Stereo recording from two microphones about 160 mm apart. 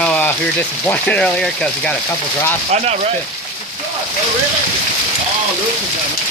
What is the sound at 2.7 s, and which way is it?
Speech, 45° right (ahead or behind).